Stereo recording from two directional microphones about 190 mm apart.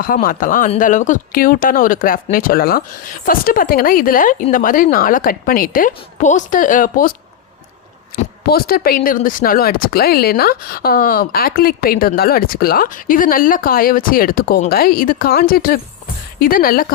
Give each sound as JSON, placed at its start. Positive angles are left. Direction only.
{"t": 0.0, "sound": "speech", "side_deg": 50}
{"t": 8.4, "sound": "speech", "side_deg": 55}